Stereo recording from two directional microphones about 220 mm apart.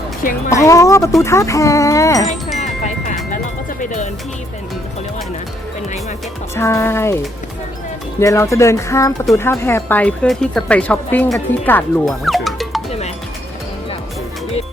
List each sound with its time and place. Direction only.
0.2 s speech: 40° left (ahead or behind)
0.5 s speech: 15° left (ahead or behind)
3.3 s music: 35° left (ahead or behind)
6.6 s speech: 10° left (ahead or behind)
8.2 s speech: 15° left (ahead or behind)